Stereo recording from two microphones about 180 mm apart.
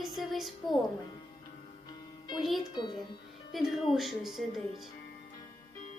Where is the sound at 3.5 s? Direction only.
Centre (ahead or behind).